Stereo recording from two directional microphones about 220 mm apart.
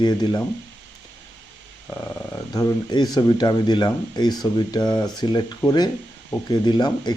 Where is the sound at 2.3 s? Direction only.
15° left (ahead or behind).